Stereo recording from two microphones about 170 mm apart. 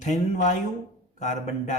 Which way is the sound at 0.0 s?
45° left (ahead or behind).